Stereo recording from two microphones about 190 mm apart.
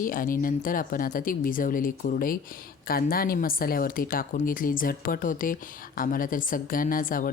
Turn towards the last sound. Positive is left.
turn(degrees=45)  # may be behind; listen again after turning